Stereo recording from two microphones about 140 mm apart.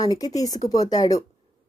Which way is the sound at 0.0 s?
25° left (ahead or behind).